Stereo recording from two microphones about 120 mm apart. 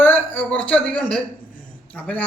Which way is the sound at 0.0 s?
15° left (ahead or behind).